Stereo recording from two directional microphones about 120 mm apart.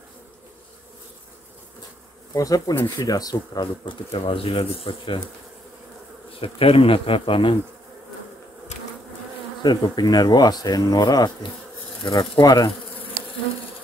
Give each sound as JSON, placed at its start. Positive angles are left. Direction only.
{"t": 2.3, "sound": "speech", "side_deg": 30}
{"t": 6.4, "sound": "speech", "side_deg": 50}
{"t": 9.6, "sound": "speech", "side_deg": 35}